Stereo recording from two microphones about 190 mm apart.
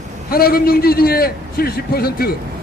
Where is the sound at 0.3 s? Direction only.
50° left (ahead or behind).